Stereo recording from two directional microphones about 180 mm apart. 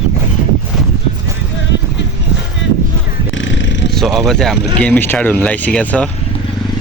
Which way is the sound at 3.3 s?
90° left.